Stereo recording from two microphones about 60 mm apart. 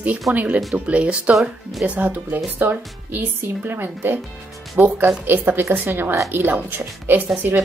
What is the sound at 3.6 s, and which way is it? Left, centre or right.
A woman's voice, right.